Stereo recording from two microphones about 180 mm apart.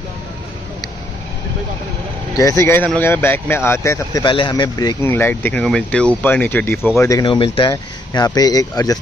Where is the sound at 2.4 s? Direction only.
15° left (ahead or behind).